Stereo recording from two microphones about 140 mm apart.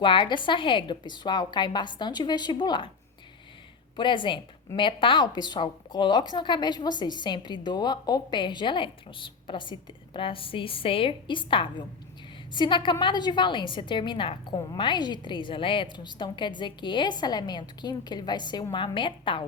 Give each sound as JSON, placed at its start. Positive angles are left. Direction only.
{"t": 0.0, "sound": "a woman's voice", "side_deg": 35}
{"t": 3.9, "sound": "a woman's voice", "side_deg": 35}